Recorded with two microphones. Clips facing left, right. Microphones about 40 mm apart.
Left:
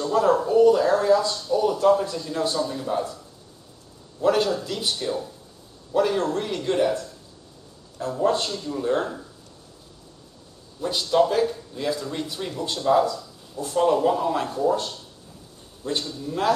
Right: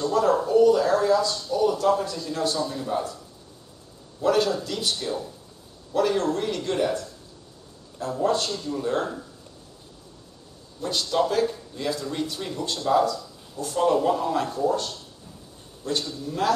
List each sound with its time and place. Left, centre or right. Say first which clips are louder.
0.1 s speech: left 2 dB; centre
4.2 s speech: left 1 dB; centre
8.2 s speech: left 1 dB; centre
8.5 s speech: left 2 dB; centre
10.8 s a man's voice: left 3 dB; centre